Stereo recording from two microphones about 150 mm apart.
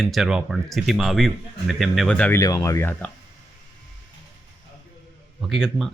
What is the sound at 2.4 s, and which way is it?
Speech, 20° left (ahead or behind).